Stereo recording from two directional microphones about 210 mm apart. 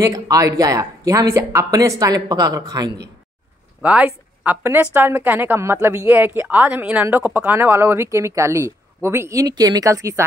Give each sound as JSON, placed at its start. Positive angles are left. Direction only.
{"t": 0.0, "sound": "speech", "side_deg": -15}
{"t": 3.8, "sound": "speech", "side_deg": -5}